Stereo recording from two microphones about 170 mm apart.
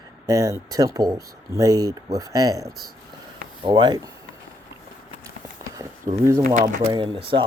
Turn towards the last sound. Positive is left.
turn(degrees=-30)  # may be behind; listen again after turning